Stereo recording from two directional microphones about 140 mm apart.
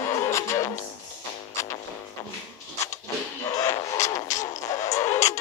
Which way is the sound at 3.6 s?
20° left (ahead or behind).